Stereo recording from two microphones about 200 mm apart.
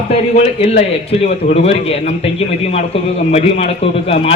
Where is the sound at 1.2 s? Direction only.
30° left (ahead or behind).